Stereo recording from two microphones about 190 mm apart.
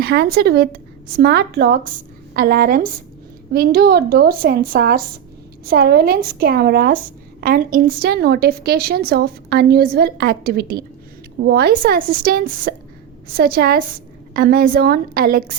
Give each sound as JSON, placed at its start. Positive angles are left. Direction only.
{"t": 0.0, "sound": "a woman's voice", "side_deg": -55}